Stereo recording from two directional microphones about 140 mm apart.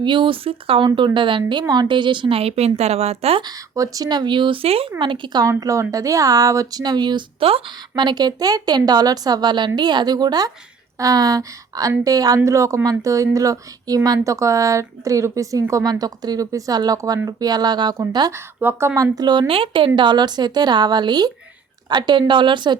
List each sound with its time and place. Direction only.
0.0 s speech: 35° right (ahead or behind)
3.4 s speech: 25° right (ahead or behind)
18.6 s speech: 15° right (ahead or behind)
19.1 s speech: 30° right (ahead or behind)